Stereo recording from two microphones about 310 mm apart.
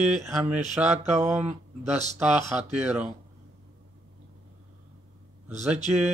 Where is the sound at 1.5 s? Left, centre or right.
Right.